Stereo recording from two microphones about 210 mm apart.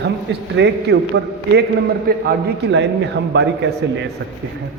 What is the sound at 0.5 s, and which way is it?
A man's voice, 55° right (ahead or behind).